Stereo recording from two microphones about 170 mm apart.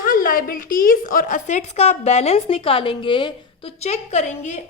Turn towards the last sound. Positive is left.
turn(degrees=45)  # may be behind; listen again after turning